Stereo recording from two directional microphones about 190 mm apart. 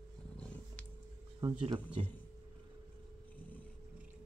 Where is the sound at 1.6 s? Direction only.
30° right (ahead or behind).